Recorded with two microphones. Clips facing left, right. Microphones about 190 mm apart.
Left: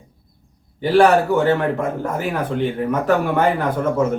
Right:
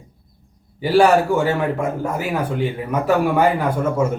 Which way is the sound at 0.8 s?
10° right (ahead or behind).